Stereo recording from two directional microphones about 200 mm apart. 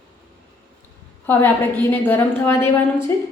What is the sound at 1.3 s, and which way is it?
A woman's voice, 10° left (ahead or behind).